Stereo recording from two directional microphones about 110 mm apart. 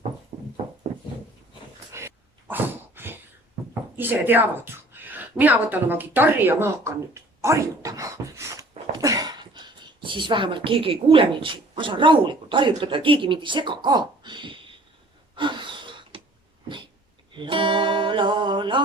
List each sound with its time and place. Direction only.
0.3 s horse: 90° right
1.9 s dog: 25° right (ahead or behind)
3.9 s speech: 20° right (ahead or behind); by 14.8 s 50° right (ahead or behind)
15.4 s gasp: 45° right (ahead or behind)
17.3 s music: 50° right (ahead or behind)